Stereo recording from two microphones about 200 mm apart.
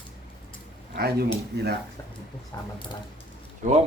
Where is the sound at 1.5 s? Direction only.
55° right (ahead or behind).